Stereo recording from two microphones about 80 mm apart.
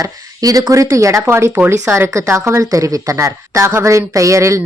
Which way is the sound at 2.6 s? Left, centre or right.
Right.